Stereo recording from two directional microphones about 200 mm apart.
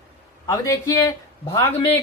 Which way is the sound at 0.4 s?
15° left (ahead or behind).